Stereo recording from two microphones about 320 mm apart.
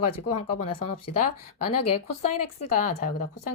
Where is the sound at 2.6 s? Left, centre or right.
Left.